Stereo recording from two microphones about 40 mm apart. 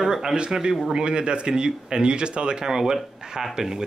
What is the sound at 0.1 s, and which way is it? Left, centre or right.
Speech, centre.